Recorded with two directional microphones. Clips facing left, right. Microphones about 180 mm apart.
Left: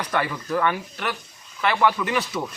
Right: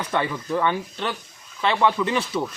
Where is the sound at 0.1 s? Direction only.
25° right (ahead or behind).